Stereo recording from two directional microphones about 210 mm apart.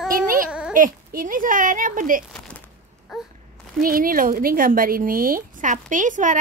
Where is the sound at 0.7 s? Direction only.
40° right (ahead or behind).